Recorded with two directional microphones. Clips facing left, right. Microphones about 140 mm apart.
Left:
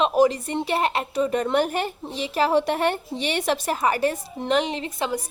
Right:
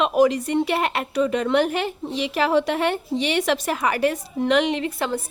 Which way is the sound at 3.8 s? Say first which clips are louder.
Right 1 dB; 30° left (ahead or behind).